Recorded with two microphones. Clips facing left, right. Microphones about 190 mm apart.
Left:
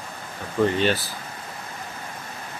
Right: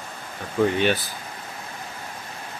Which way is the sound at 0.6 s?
10° right (ahead or behind).